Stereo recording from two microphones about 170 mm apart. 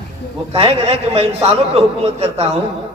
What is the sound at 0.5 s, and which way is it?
A man's voice, 35° right (ahead or behind).